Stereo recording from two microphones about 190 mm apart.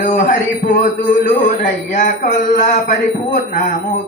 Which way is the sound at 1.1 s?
45° left (ahead or behind).